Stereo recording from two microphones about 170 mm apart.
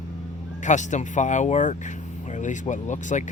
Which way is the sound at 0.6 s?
45° left (ahead or behind).